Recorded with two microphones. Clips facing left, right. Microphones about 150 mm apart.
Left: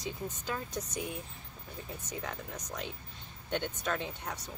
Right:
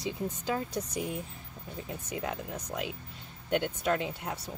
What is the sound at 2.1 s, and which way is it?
Speech, 10° right (ahead or behind).